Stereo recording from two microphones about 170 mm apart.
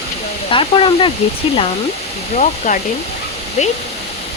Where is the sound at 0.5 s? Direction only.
30° left (ahead or behind).